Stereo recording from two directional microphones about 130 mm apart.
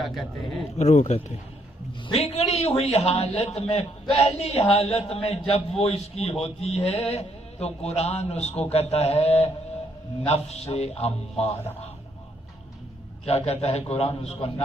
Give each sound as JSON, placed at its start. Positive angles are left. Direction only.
{"t": 0.0, "sound": "speech", "side_deg": 0}
{"t": 0.8, "sound": "a man's voice", "side_deg": 60}
{"t": 13.2, "sound": "a man's voice", "side_deg": 55}